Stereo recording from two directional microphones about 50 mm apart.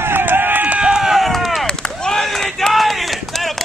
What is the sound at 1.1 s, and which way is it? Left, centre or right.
Chop, centre.